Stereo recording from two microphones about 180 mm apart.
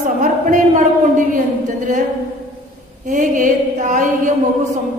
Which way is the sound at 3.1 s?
45° right (ahead or behind).